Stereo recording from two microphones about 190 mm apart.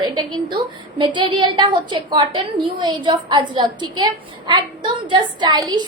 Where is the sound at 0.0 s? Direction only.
25° right (ahead or behind).